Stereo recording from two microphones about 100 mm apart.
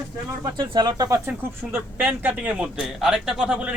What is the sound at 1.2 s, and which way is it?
A man's voice, 20° right (ahead or behind).